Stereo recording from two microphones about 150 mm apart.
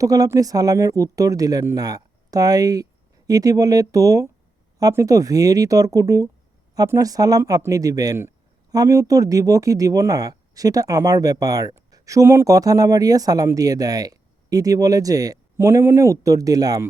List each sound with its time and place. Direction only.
0.0 s speech: 25° right (ahead or behind)